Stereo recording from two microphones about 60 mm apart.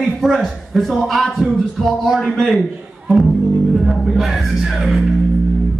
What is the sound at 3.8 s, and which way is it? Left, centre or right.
Speech, centre.